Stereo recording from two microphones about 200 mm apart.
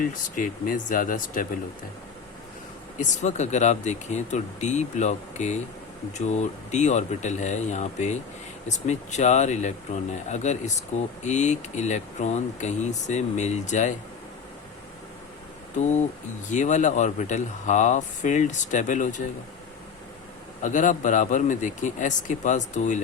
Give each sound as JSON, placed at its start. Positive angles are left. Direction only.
{"t": 0.0, "sound": "speech", "side_deg": 40}
{"t": 3.0, "sound": "speech", "side_deg": 35}
{"t": 15.8, "sound": "speech", "side_deg": 35}
{"t": 20.6, "sound": "speech", "side_deg": 40}